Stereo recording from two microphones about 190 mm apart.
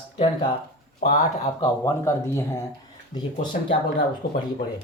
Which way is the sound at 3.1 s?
40° left (ahead or behind).